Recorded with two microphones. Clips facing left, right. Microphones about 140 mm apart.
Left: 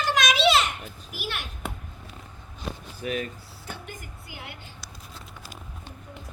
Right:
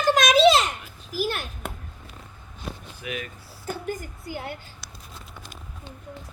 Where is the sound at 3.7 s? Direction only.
40° right (ahead or behind).